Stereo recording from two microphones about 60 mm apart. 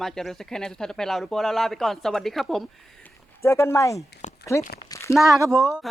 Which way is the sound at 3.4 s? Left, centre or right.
Left.